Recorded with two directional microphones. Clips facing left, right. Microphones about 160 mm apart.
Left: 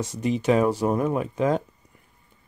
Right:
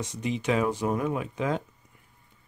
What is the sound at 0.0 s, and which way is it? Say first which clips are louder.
Speech: left 5 dB; 45° left (ahead or behind).